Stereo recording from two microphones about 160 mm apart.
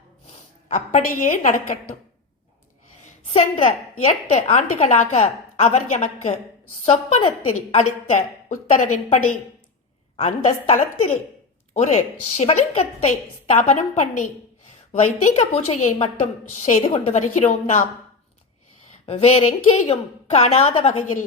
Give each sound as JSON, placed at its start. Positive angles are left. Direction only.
{"t": 0.3, "sound": "a sound", "side_deg": 50}
{"t": 1.5, "sound": "a woman's voice", "side_deg": 55}
{"t": 3.3, "sound": "a woman's voice", "side_deg": 40}
{"t": 19.0, "sound": "a woman's voice", "side_deg": 40}